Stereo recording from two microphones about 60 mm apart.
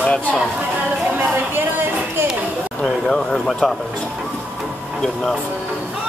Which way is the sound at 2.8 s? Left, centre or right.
Centre.